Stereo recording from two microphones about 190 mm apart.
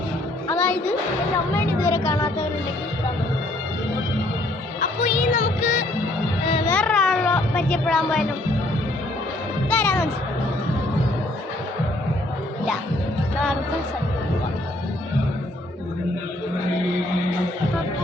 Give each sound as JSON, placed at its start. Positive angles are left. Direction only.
{"t": 0.4, "sound": "music", "side_deg": 10}
{"t": 1.5, "sound": "a sound", "side_deg": 15}
{"t": 4.8, "sound": "music", "side_deg": 45}
{"t": 6.7, "sound": "music", "side_deg": 5}
{"t": 9.6, "sound": "music", "side_deg": 5}